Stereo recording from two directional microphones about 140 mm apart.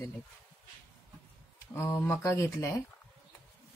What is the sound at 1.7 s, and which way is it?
Speech, 20° left (ahead or behind).